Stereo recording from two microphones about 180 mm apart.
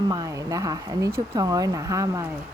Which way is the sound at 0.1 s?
20° right (ahead or behind).